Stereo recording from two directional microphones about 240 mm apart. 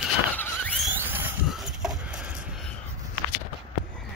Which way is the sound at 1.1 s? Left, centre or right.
Centre.